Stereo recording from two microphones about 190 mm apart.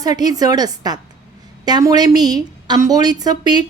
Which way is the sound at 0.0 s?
20° right (ahead or behind).